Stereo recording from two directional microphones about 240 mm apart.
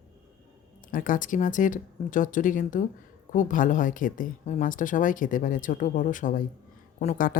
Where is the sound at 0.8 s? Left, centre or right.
Left.